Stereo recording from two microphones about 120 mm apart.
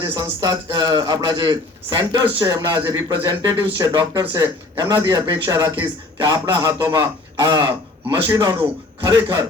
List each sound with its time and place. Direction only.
0.1 s a man's voice: 35° right (ahead or behind)